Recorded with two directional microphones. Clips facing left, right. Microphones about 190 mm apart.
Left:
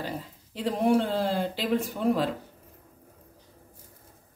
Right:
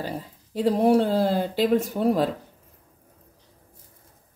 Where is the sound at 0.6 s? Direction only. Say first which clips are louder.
Right 5 dB; 40° right (ahead or behind).